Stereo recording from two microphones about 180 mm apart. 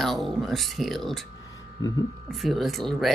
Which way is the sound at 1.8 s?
20° left (ahead or behind).